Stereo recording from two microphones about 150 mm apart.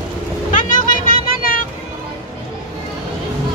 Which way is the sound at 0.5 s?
65° left (ahead or behind).